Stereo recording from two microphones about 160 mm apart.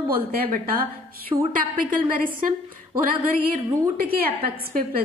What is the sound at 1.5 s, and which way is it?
Speech, 55° right (ahead or behind).